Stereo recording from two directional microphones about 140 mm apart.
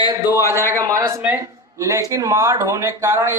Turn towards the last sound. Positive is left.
turn(degrees=-15)  # may be behind; listen again after turning